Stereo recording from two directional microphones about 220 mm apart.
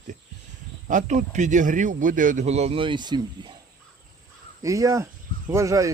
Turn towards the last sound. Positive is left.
turn(degrees=-15)  # may be behind; listen again after turning